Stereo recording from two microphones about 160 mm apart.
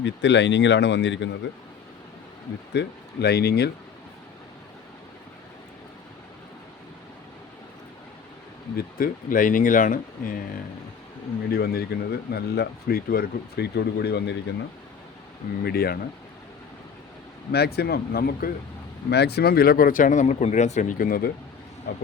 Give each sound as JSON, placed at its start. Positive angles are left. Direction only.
{"t": 0.0, "sound": "speech", "side_deg": 90}
{"t": 2.7, "sound": "speech", "side_deg": 90}
{"t": 8.7, "sound": "speech", "side_deg": 60}
{"t": 11.5, "sound": "speech", "side_deg": 80}
{"t": 15.6, "sound": "speech", "side_deg": 75}
{"t": 17.5, "sound": "speech", "side_deg": 90}
{"t": 19.1, "sound": "speech", "side_deg": 90}
{"t": 21.9, "sound": "speech", "side_deg": 80}